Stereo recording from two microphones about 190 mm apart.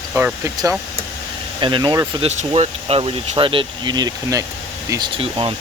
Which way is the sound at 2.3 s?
35° right (ahead or behind).